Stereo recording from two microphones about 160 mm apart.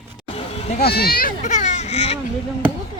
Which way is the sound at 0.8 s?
75° left (ahead or behind).